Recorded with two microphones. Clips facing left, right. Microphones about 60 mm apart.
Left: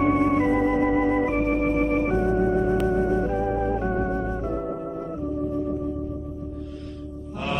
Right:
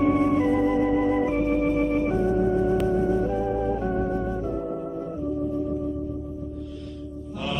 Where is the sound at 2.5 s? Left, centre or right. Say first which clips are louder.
Even; left.